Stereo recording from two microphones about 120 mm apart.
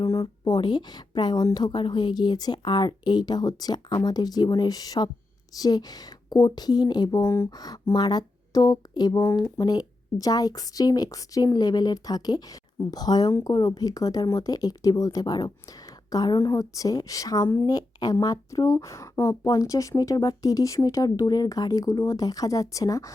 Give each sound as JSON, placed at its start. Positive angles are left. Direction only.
{"t": 0.0, "sound": "a woman's voice", "side_deg": 30}